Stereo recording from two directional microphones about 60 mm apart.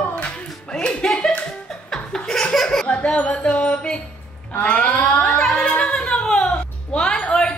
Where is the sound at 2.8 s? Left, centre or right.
Centre.